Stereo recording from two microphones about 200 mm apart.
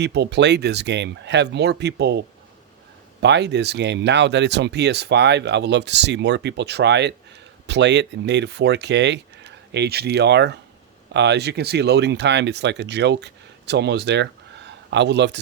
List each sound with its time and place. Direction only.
0.0 s speech: 60° right (ahead or behind)